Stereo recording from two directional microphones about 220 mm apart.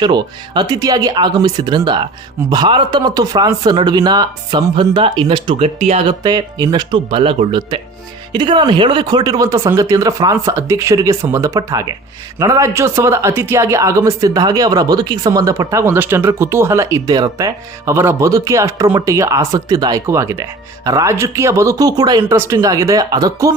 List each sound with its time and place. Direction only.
0.0 s speech: 20° right (ahead or behind)